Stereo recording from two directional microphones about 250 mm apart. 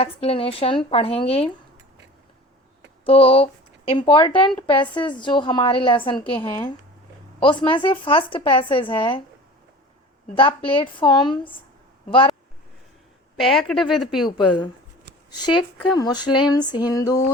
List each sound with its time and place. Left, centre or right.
0.0 s speech: left
3.1 s speech: left
10.3 s speech: left
13.4 s speech: centre
14.3 s speech: centre